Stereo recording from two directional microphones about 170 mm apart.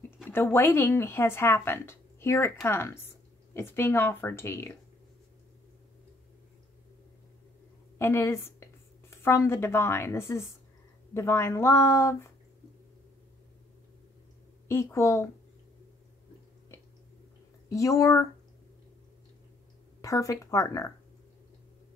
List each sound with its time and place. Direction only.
0.3 s speech: 15° left (ahead or behind)
8.0 s a woman's voice: 15° left (ahead or behind)
14.7 s speech: 15° left (ahead or behind)
17.6 s speech: 20° left (ahead or behind)
20.0 s speech: 20° left (ahead or behind)